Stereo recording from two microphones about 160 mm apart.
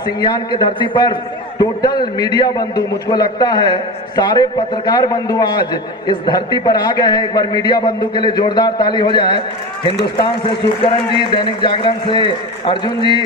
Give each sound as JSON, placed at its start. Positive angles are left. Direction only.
{"t": 0.0, "sound": "a man's voice", "side_deg": 25}